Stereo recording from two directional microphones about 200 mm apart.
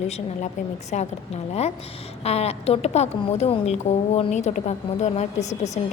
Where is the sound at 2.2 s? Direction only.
30° left (ahead or behind).